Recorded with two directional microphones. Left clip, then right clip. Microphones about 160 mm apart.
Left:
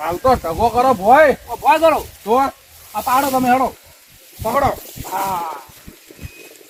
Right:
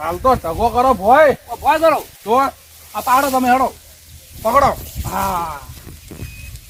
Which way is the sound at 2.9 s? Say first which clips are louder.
Right 1 dB; 20° right (ahead or behind).